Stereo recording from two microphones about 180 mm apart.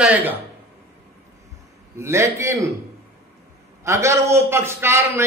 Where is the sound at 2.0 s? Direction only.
15° right (ahead or behind).